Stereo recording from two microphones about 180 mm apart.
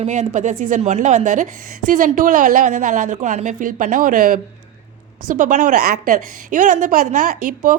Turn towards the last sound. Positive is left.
turn(degrees=-50)  # may be behind; listen again after turning